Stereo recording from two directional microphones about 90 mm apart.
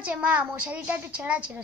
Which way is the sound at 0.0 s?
15° right (ahead or behind).